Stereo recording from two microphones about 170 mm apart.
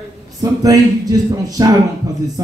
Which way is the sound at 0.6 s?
20° right (ahead or behind).